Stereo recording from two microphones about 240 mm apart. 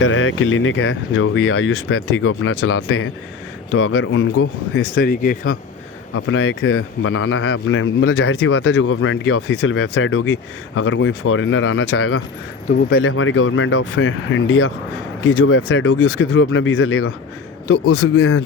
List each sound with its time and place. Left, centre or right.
0.0 s speech: left
4.9 s speech: left
6.1 s speech: left